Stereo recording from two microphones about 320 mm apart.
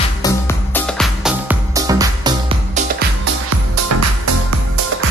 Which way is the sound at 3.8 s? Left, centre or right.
Right.